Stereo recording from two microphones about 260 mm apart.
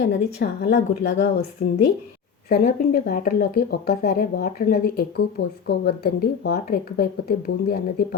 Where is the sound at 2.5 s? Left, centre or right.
Left.